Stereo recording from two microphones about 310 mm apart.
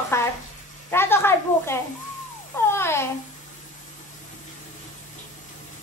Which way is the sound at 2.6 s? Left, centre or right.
Centre.